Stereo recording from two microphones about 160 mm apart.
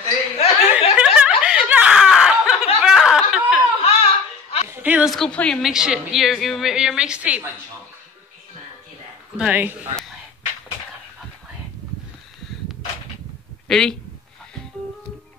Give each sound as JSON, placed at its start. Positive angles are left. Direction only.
{"t": 0.4, "sound": "chuckle", "side_deg": 40}
{"t": 0.9, "sound": "snicker", "side_deg": -5}
{"t": 3.8, "sound": "a sound", "side_deg": 40}
{"t": 4.6, "sound": "music", "side_deg": -10}
{"t": 5.1, "sound": "speech", "side_deg": 5}
{"t": 9.4, "sound": "speech", "side_deg": -10}
{"t": 13.7, "sound": "speech", "side_deg": 5}